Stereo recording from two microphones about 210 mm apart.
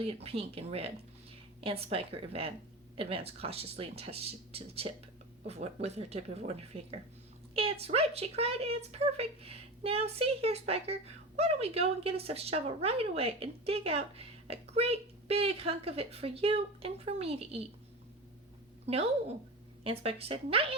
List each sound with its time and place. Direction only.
0.0 s a woman's voice: 30° right (ahead or behind)
18.9 s speech: 30° right (ahead or behind)